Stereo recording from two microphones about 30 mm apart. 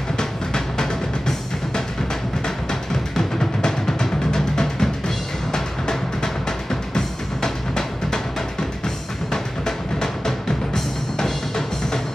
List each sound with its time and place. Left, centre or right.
0.2 s music: left